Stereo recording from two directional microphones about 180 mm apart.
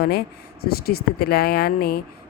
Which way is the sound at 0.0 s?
60° left (ahead or behind).